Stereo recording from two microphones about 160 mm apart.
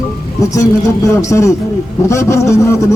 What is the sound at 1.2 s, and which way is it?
Speech, 20° left (ahead or behind).